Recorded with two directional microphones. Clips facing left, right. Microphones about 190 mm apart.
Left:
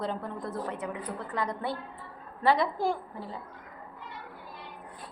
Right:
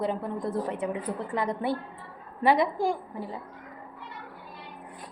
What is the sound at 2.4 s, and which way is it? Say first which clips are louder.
Speech: right 2 dB; 20° right (ahead or behind).